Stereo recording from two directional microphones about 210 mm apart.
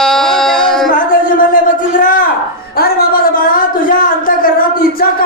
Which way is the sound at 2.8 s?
45° left (ahead or behind).